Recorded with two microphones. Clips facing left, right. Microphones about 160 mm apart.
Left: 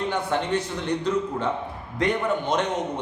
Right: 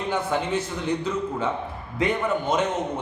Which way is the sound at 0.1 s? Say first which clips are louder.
Right 4 dB; 5° right (ahead or behind).